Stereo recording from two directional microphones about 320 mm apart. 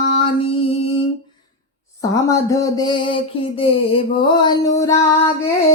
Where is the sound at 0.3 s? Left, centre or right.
Centre.